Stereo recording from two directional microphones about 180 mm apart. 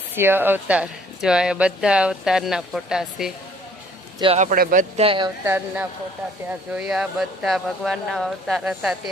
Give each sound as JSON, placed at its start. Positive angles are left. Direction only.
{"t": 0.1, "sound": "speech", "side_deg": -10}
{"t": 4.4, "sound": "speech", "side_deg": -50}
{"t": 5.0, "sound": "speech", "side_deg": -25}
{"t": 5.5, "sound": "speech", "side_deg": -10}